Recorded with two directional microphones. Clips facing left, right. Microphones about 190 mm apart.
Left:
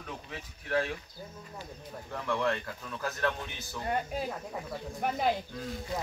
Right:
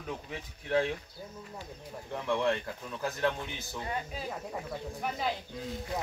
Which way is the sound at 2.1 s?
20° right (ahead or behind).